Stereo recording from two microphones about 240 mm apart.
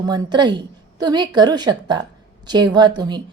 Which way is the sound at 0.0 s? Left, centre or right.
Centre.